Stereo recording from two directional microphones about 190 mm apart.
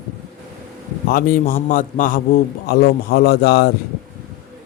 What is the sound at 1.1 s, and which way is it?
A man's voice, 50° left (ahead or behind).